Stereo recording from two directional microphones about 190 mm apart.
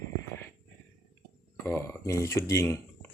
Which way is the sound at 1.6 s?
15° left (ahead or behind).